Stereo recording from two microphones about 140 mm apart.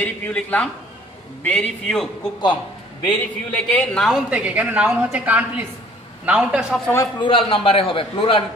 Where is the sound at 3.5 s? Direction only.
10° left (ahead or behind); by 6.6 s 10° right (ahead or behind).